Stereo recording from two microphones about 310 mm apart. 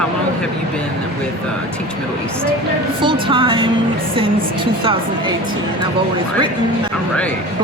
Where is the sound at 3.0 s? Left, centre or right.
Centre.